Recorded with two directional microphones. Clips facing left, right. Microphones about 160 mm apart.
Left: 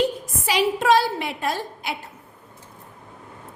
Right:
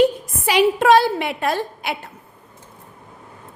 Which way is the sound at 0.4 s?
60° right (ahead or behind).